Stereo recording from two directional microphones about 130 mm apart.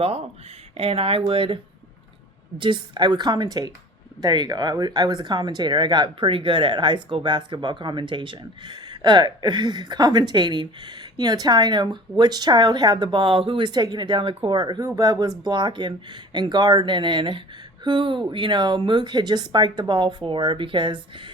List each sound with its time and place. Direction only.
0.0 s speech: 50° right (ahead or behind)
2.6 s speech: 40° right (ahead or behind)